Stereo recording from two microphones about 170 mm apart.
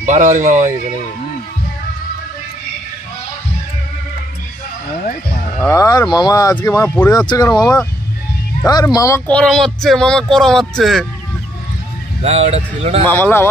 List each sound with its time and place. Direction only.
0.0 s speech: 45° right (ahead or behind)
5.6 s speech: 20° left (ahead or behind)
9.3 s speech: 5° left (ahead or behind)
12.2 s speech: 35° right (ahead or behind)
13.1 s speech: 15° left (ahead or behind)